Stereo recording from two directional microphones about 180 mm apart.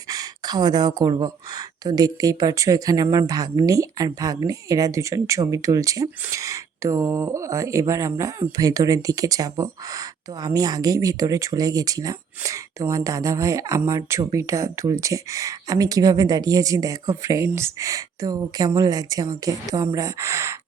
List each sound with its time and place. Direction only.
0.1 s speech: 20° right (ahead or behind)